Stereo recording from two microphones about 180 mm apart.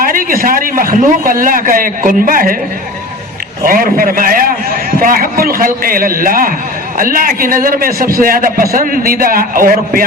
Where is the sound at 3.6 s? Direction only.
50° right (ahead or behind).